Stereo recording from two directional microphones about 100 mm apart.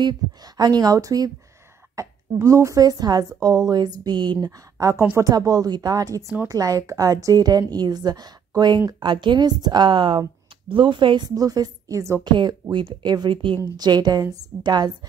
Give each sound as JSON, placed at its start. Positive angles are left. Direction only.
{"t": 0.0, "sound": "a woman's voice", "side_deg": -40}
{"t": 12.3, "sound": "a woman's voice", "side_deg": -50}
{"t": 13.7, "sound": "a woman's voice", "side_deg": -45}